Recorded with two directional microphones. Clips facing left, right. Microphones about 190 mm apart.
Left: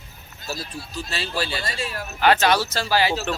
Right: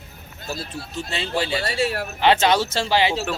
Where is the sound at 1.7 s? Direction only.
70° right (ahead or behind).